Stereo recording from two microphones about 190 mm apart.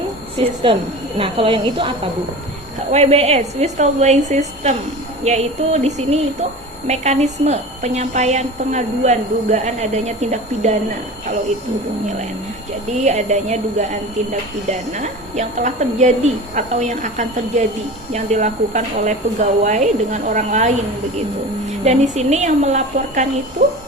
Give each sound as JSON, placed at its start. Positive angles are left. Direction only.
{"t": 0.3, "sound": "a woman's voice", "side_deg": -30}
{"t": 2.9, "sound": "speech", "side_deg": -35}
{"t": 12.9, "sound": "speech", "side_deg": -35}
{"t": 21.8, "sound": "speech", "side_deg": -35}